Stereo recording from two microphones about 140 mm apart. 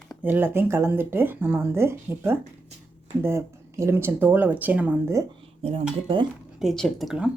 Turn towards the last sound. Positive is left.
turn(degrees=-5)  # may be behind; listen again after turning